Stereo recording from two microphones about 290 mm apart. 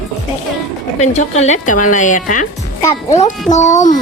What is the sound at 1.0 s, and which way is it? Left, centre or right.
Speech, left.